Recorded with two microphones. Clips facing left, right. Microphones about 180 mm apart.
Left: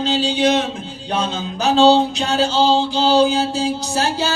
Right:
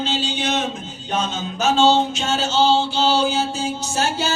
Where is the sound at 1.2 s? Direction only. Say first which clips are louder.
Left 1 dB; 35° left (ahead or behind).